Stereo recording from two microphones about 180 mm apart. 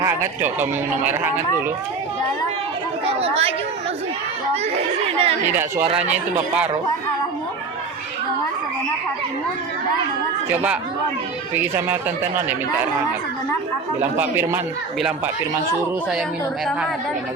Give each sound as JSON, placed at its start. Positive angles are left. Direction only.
{"t": 0.0, "sound": "a man's voice", "side_deg": -15}
{"t": 3.1, "sound": "speech", "side_deg": -35}
{"t": 4.5, "sound": "speech", "side_deg": -35}
{"t": 5.5, "sound": "a man's voice", "side_deg": -15}
{"t": 5.8, "sound": "speech", "side_deg": -35}
{"t": 6.1, "sound": "a man's voice", "side_deg": -5}
{"t": 10.5, "sound": "a man's voice", "side_deg": -10}
{"t": 14.0, "sound": "a man's voice", "side_deg": -10}